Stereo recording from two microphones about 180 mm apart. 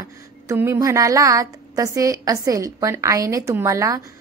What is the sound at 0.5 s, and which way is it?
A woman's voice, 15° right (ahead or behind).